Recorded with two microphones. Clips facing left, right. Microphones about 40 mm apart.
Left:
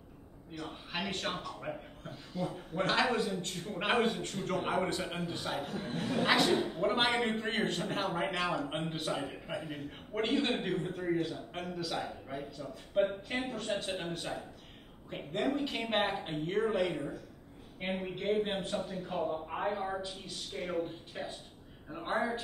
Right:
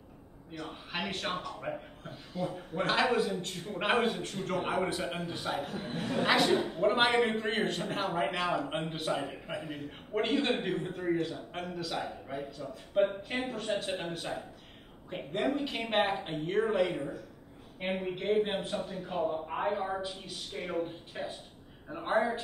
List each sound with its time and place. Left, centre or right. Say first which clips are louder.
0.5 s a man's voice: right 1 dB; centre